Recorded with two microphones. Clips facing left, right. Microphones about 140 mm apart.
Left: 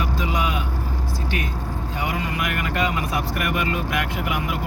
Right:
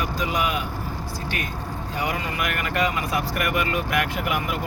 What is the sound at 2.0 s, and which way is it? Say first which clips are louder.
Speech: even; 20° left (ahead or behind).